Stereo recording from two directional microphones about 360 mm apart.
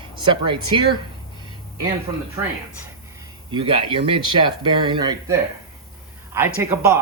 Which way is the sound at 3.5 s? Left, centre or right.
Centre.